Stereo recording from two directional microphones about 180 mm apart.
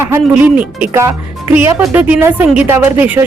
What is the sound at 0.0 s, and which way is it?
Speech, 10° right (ahead or behind).